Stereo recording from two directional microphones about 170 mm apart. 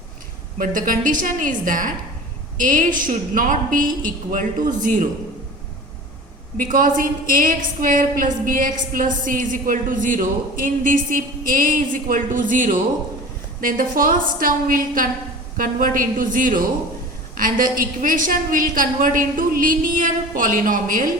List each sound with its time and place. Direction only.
0.6 s a woman's voice: 55° right (ahead or behind)
6.6 s a woman's voice: 55° right (ahead or behind)